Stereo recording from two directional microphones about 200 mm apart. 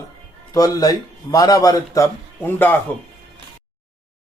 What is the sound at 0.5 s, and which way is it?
Speech, 20° left (ahead or behind).